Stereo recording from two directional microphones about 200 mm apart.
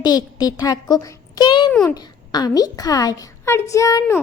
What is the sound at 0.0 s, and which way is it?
A child's voice, 20° left (ahead or behind).